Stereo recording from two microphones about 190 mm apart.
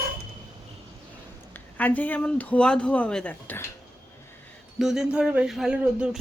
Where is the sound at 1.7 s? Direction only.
10° left (ahead or behind).